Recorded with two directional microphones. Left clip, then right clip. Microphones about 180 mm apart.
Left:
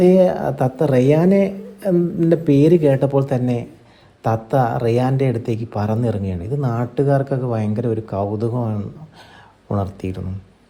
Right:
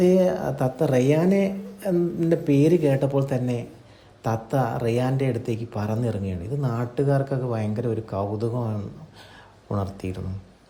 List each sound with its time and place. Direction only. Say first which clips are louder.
0.0 s speech: left 6 dB; 15° left (ahead or behind)